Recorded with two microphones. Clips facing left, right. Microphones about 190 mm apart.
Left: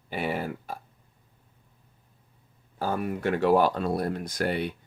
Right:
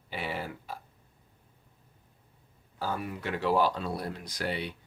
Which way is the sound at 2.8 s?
50° left (ahead or behind).